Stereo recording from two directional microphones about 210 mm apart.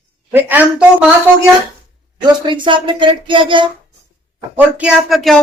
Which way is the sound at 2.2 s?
20° right (ahead or behind).